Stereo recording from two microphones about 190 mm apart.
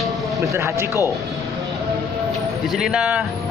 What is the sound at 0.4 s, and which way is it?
Speech, 15° right (ahead or behind).